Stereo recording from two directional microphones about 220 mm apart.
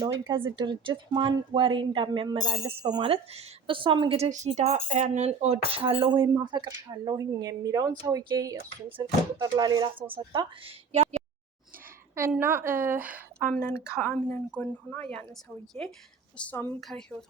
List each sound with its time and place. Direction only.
0.5 s speech: 20° right (ahead or behind)
12.1 s speech: 10° right (ahead or behind)
13.5 s a woman's voice: 10° left (ahead or behind)
13.7 s a woman's voice: 5° right (ahead or behind)